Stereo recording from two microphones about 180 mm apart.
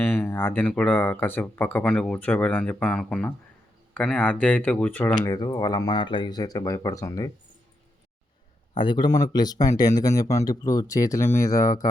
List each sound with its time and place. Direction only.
0.0 s speech: 10° left (ahead or behind)
8.8 s speech: 25° left (ahead or behind)